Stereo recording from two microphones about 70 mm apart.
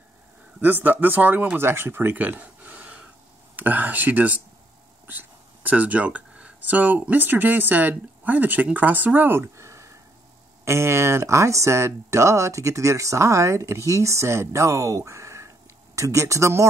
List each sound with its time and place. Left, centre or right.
0.6 s speech: right